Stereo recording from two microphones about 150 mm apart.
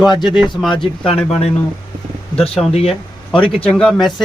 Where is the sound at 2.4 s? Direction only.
40° left (ahead or behind).